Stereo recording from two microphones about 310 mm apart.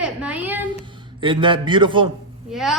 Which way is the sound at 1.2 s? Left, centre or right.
Centre.